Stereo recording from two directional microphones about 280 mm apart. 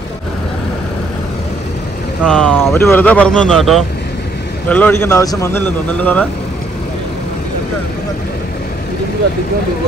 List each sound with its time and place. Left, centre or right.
2.2 s a man's voice: centre